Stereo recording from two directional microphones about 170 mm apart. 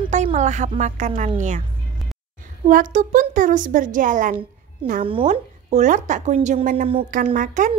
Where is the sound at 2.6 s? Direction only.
50° right (ahead or behind).